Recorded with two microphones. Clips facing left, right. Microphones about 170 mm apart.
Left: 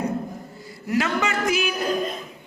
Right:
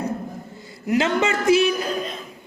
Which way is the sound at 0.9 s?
25° right (ahead or behind).